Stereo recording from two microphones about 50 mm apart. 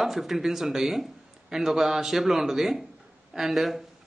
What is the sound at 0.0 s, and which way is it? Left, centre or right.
A man's voice, centre.